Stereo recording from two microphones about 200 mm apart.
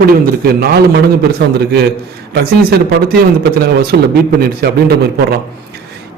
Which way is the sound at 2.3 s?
50° right (ahead or behind).